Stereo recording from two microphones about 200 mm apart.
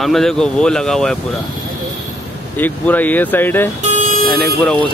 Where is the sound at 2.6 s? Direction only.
10° left (ahead or behind).